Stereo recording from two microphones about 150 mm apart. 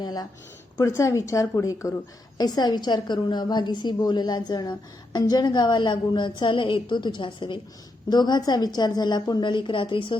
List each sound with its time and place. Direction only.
0.0 s a woman's voice: 25° left (ahead or behind)